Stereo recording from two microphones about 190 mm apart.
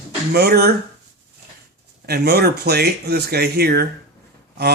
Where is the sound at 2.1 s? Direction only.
55° right (ahead or behind).